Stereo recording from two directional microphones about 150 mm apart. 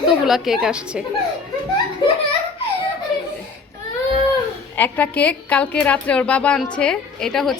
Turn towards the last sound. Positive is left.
turn(degrees=0)  # may be behind; listen again after turning